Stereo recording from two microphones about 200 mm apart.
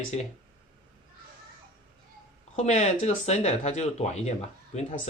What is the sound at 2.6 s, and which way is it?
Speech, 35° left (ahead or behind).